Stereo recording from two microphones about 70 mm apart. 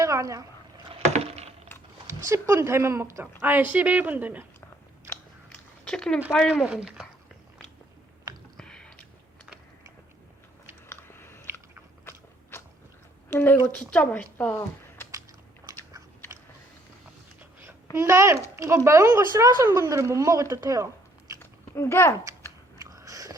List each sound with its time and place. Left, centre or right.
0.0 s speech: right
2.0 s speech: right
3.4 s a woman's voice: right
5.8 s speech: centre
6.7 s speech: centre
8.5 s chewing: centre
10.8 s biting: left
13.3 s a woman's voice: left
15.7 s biting: right
17.9 s a child's voice: right
21.3 s chewing: left
22.8 s biting: right